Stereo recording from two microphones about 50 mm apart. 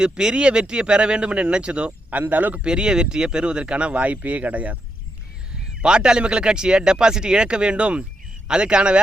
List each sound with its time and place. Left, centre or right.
0.0 s speech: centre
2.0 s speech: right
2.6 s speech: centre
5.8 s speech: centre